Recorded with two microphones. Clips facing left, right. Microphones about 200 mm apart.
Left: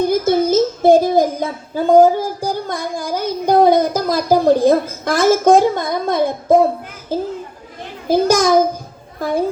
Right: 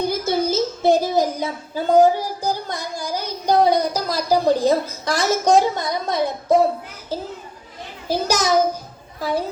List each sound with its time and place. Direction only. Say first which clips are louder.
0.0 s a child's voice: left 6 dB; 50° left (ahead or behind)
8.0 s a child's voice: left 7 dB; 50° left (ahead or behind)